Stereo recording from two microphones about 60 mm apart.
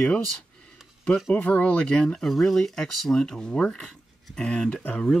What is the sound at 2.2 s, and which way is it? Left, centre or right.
Speech, centre.